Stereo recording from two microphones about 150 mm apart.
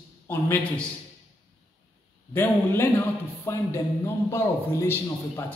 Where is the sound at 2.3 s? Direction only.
15° left (ahead or behind).